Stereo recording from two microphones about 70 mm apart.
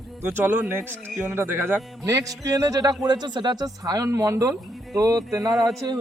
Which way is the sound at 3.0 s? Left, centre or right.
Right.